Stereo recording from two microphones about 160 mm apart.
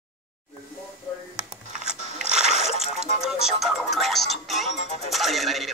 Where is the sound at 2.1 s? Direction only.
5° right (ahead or behind).